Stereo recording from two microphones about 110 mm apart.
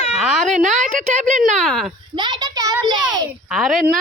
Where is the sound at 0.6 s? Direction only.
90° right.